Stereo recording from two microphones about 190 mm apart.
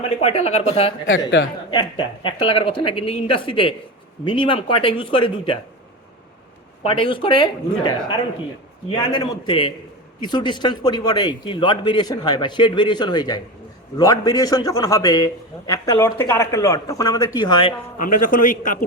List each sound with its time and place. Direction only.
0.3 s speech: 30° left (ahead or behind)
1.0 s speech: 85° left
1.7 s a man's voice: 25° left (ahead or behind)
6.8 s a man's voice: 25° left (ahead or behind)
17.9 s a man's voice: 45° left (ahead or behind)